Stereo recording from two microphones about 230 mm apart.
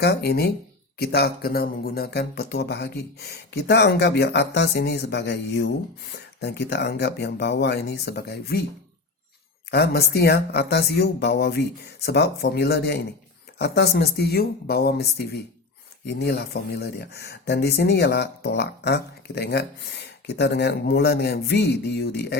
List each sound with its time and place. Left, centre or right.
0.0 s speech: left
9.6 s speech: left